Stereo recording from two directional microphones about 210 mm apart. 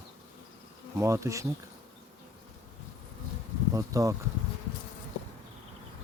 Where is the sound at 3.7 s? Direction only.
15° right (ahead or behind).